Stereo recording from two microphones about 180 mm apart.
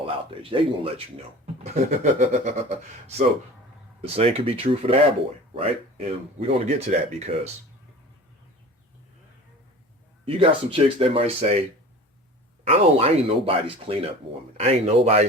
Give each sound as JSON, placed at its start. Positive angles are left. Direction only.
{"t": 0.0, "sound": "speech", "side_deg": -30}
{"t": 4.0, "sound": "speech", "side_deg": -35}
{"t": 10.2, "sound": "speech", "side_deg": -30}
{"t": 12.6, "sound": "speech", "side_deg": -35}